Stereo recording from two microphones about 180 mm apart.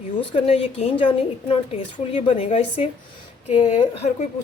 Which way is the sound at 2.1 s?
35° left (ahead or behind).